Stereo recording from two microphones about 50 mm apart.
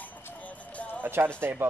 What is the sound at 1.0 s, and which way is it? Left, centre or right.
Speech, right.